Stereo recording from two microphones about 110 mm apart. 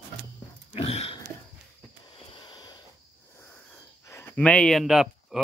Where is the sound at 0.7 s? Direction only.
65° left (ahead or behind).